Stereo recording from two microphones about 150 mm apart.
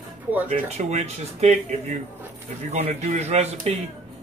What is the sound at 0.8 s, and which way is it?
Speech, 45° right (ahead or behind).